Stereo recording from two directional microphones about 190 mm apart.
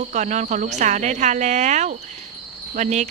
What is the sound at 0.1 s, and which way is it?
A woman's voice, 40° right (ahead or behind).